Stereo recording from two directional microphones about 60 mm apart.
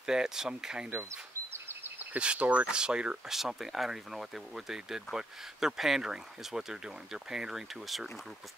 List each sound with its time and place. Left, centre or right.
0.0 s speech: centre
1.5 s a sound: right
2.1 s speech: centre
3.3 s speech: centre